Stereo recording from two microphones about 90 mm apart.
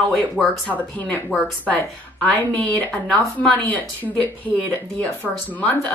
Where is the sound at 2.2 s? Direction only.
15° left (ahead or behind).